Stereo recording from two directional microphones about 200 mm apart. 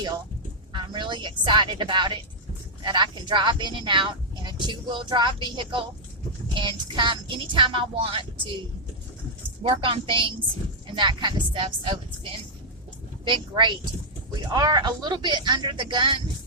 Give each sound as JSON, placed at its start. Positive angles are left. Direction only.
{"t": 0.7, "sound": "speech", "side_deg": -25}
{"t": 9.6, "sound": "speech", "side_deg": -25}